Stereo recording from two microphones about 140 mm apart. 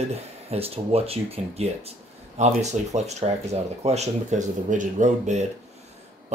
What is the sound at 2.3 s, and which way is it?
Speech, 55° right (ahead or behind).